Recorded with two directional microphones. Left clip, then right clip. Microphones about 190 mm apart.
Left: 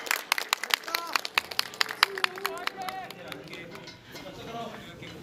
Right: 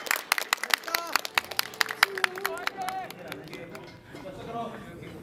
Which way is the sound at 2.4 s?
45° right (ahead or behind).